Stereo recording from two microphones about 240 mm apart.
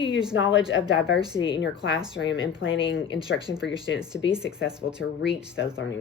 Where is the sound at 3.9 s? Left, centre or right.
Left.